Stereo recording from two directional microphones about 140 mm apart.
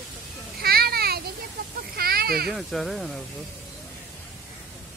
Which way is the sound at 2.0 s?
90° right.